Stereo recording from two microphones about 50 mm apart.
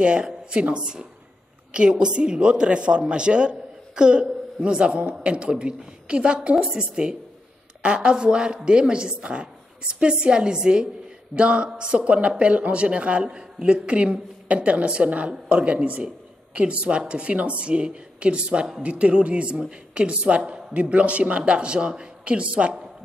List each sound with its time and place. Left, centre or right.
0.0 s a woman's voice: centre